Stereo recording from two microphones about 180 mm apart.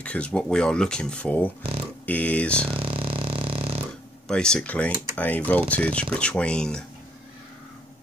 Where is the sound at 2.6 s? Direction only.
30° right (ahead or behind).